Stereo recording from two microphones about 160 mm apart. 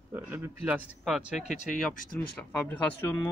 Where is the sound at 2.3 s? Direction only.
10° left (ahead or behind).